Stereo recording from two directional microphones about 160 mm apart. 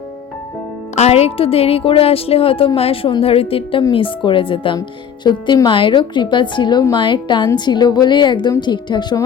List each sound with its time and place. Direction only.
0.9 s a woman's voice: 40° left (ahead or behind)